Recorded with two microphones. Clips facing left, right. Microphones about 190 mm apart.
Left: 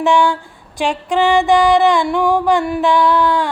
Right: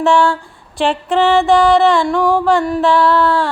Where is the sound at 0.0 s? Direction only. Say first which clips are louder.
Right 1 dB; 15° left (ahead or behind).